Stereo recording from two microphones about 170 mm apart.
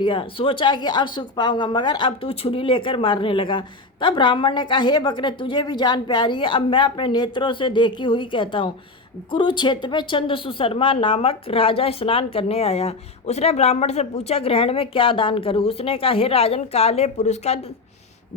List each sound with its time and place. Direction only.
0.0 s a woman's voice: 30° left (ahead or behind)